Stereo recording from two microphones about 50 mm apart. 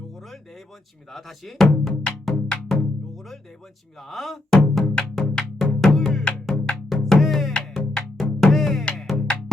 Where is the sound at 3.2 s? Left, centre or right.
Centre.